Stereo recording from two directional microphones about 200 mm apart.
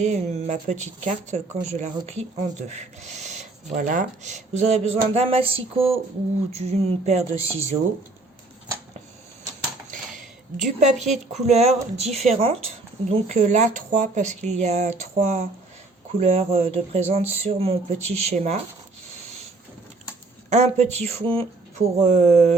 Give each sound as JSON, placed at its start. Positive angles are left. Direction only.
{"t": 0.0, "sound": "speech", "side_deg": -35}
{"t": 9.9, "sound": "a sound", "side_deg": -40}
{"t": 11.1, "sound": "speech", "side_deg": -35}
{"t": 20.5, "sound": "speech", "side_deg": -35}